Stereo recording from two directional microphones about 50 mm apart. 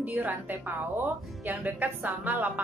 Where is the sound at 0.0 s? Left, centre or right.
Right.